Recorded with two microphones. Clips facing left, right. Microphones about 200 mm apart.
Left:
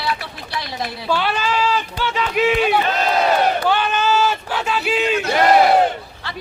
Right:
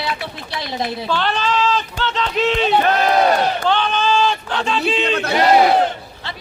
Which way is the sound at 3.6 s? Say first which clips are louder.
Even; 10° left (ahead or behind).